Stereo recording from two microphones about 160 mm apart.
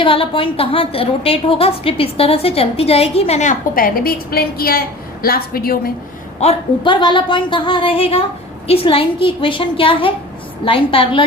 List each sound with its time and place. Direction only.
0.0 s a woman's voice: 35° left (ahead or behind); by 5.9 s 65° left (ahead or behind)
6.4 s a woman's voice: 35° left (ahead or behind)